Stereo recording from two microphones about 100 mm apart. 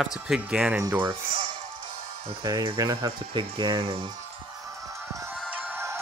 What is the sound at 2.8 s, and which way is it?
Speech, 50° right (ahead or behind).